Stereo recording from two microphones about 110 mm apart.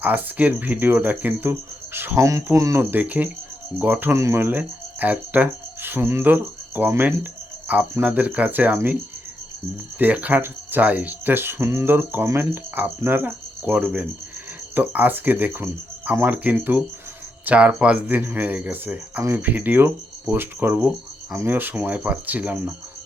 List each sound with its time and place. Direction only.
0.0 s speech: 15° right (ahead or behind)
2.9 s speech: 15° right (ahead or behind)
10.0 s speech: 15° right (ahead or behind)